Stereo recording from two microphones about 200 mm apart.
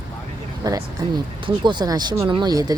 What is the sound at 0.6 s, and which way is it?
Speech, 20° right (ahead or behind).